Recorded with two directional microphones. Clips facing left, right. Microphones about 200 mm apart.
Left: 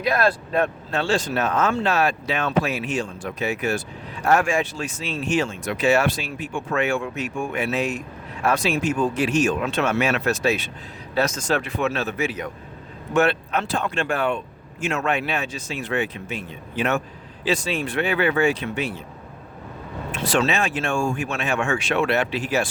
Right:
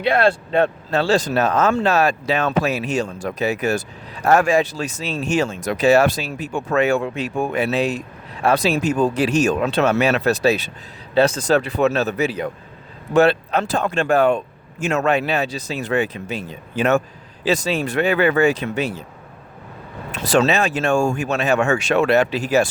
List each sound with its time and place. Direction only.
0.0 s speech: 30° right (ahead or behind)
20.1 s speech: 40° right (ahead or behind)